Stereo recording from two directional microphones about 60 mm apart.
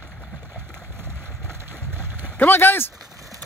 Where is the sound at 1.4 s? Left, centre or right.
Right.